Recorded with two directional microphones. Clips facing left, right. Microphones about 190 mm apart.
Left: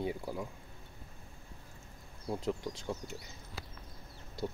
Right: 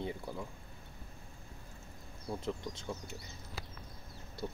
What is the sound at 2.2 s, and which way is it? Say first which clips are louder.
Speech: left 3 dB; 15° left (ahead or behind).